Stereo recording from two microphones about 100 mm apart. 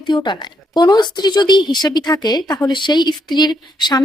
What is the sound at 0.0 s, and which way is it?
A woman's voice, 50° left (ahead or behind).